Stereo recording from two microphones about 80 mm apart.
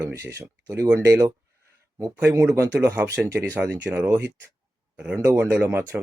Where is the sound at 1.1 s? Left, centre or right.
Right.